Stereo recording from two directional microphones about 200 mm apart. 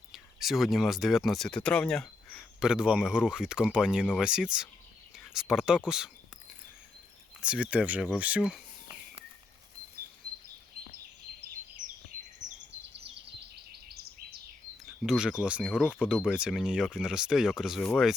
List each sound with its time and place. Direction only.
0.1 s speech: centre (ahead or behind)
7.4 s speech: 5° right (ahead or behind)
11.8 s a sound: 40° right (ahead or behind)
12.7 s bird vocalization: 60° right (ahead or behind)
13.1 s bird: 55° right (ahead or behind)
15.0 s speech: 5° right (ahead or behind)